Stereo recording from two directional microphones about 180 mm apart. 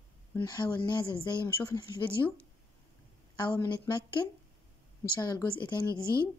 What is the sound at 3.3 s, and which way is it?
Speech, 25° left (ahead or behind).